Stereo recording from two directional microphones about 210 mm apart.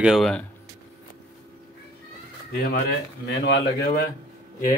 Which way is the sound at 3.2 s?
55° left (ahead or behind).